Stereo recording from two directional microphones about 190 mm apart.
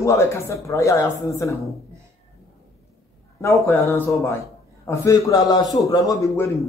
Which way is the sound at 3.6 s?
15° left (ahead or behind).